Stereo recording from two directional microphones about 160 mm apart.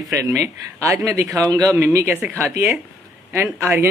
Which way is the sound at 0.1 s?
20° right (ahead or behind).